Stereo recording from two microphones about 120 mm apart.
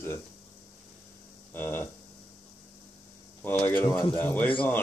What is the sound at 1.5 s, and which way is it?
Hum, 15° left (ahead or behind).